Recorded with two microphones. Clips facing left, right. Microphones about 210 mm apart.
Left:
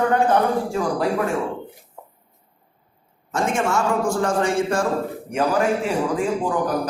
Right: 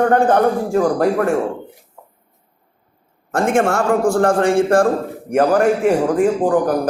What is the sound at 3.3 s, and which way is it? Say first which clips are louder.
A man's voice: right 6 dB; 55° right (ahead or behind).